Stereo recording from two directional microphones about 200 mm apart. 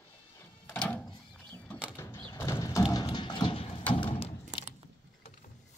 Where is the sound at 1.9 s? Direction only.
15° left (ahead or behind).